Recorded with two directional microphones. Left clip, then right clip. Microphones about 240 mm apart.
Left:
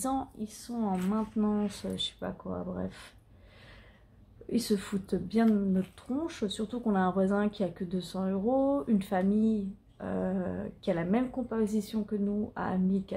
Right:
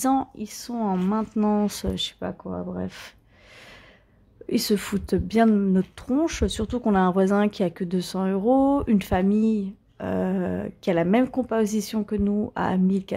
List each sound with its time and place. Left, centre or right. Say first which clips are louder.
0.0 s speech: right 10 dB; right
4.5 s speech: right 7 dB; right